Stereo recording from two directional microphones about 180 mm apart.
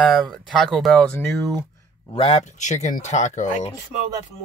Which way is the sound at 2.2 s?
35° left (ahead or behind).